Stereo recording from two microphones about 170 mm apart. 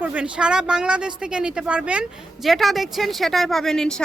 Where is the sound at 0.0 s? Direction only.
10° right (ahead or behind).